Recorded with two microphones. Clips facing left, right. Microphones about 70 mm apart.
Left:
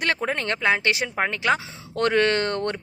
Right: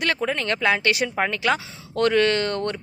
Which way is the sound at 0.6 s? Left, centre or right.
Centre.